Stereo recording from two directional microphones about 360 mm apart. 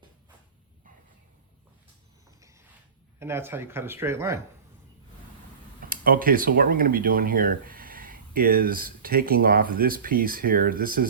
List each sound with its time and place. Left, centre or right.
3.2 s speech: centre
5.9 s speech: right